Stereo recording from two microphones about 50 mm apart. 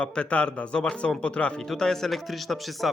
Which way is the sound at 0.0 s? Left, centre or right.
Left.